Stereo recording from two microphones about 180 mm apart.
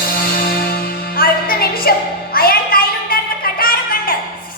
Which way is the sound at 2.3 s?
55° left (ahead or behind).